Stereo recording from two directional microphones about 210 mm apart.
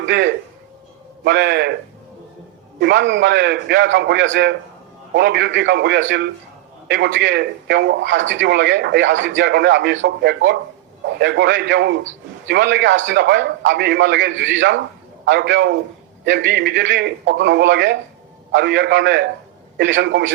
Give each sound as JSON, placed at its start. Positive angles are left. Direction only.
{"t": 0.0, "sound": "a man's voice", "side_deg": -55}
{"t": 2.8, "sound": "a man's voice", "side_deg": -55}